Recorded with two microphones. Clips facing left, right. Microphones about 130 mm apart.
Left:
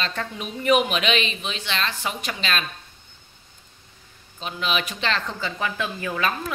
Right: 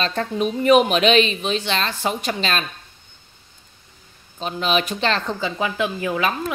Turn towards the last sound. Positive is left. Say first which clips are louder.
# right 4 dB
turn(degrees=-15)  # may be behind; listen again after turning